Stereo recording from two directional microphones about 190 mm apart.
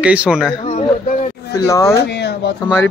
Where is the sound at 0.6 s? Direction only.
40° left (ahead or behind).